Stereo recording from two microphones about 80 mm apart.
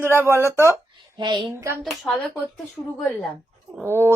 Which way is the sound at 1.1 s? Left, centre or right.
Right.